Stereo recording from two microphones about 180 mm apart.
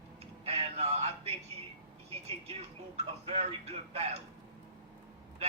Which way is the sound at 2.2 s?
35° right (ahead or behind).